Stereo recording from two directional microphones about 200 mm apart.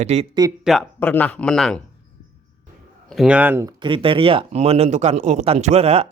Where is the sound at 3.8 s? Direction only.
25° right (ahead or behind).